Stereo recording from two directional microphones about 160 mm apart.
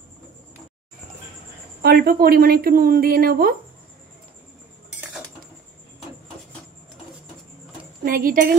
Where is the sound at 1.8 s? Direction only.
70° right (ahead or behind).